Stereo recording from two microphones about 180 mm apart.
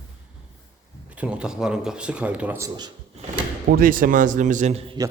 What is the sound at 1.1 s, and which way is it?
A man's voice, 5° right (ahead or behind).